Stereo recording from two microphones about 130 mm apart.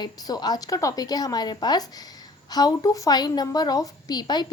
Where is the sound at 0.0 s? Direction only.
30° left (ahead or behind).